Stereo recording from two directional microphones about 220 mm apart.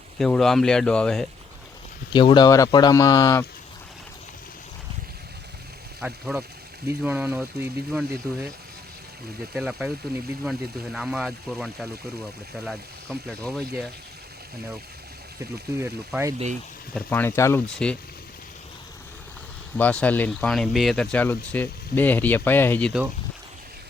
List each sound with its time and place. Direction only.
0.2 s speech: centre (ahead or behind)
2.1 s speech: 20° left (ahead or behind)
6.0 s speech: centre (ahead or behind)
9.6 s speech: centre (ahead or behind)
15.8 s speech: 10° right (ahead or behind)
16.9 s speech: 10° left (ahead or behind)
19.7 s speech: 5° left (ahead or behind)